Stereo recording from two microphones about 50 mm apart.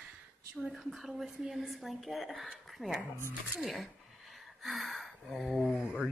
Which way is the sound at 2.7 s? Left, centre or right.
Centre.